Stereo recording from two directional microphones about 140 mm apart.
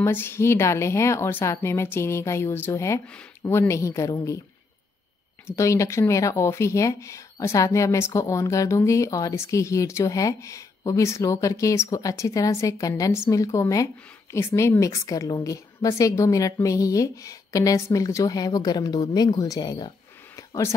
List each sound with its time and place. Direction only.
0.0 s speech: 15° left (ahead or behind)
3.1 s speech: 10° left (ahead or behind)
3.5 s speech: 20° left (ahead or behind)
5.6 s speech: 20° left (ahead or behind)
20.3 s a sound: 20° left (ahead or behind)